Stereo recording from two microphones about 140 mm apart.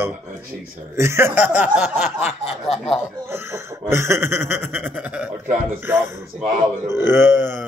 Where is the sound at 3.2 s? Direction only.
15° right (ahead or behind).